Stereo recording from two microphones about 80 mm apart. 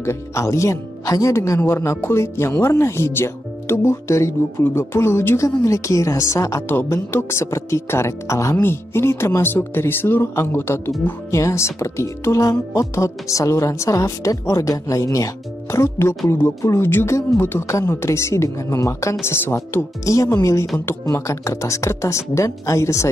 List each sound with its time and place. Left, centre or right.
0.0 s speech: left
6.7 s speech: left